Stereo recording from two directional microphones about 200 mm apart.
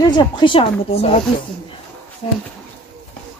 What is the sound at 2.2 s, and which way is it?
Speech, 30° left (ahead or behind).